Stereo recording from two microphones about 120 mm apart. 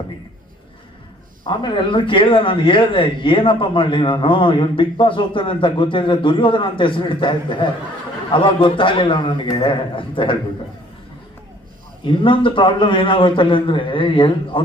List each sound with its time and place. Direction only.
1.5 s a man's voice: 40° left (ahead or behind)
12.0 s a man's voice: 45° left (ahead or behind)